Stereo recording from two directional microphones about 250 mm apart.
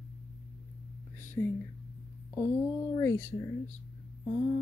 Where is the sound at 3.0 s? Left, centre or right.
Centre.